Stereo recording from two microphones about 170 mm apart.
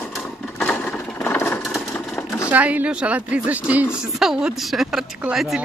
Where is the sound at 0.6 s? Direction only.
5° left (ahead or behind).